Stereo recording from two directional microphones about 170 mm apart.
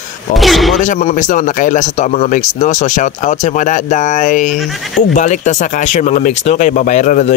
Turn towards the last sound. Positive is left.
turn(degrees=45)  # may be behind; listen again after turning